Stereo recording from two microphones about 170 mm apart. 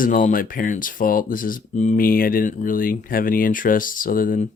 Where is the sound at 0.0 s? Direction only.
55° left (ahead or behind).